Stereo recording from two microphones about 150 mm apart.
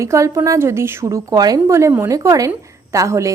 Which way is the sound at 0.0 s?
20° right (ahead or behind).